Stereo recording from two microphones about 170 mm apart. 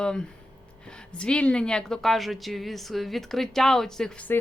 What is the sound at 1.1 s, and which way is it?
Speech, 5° left (ahead or behind).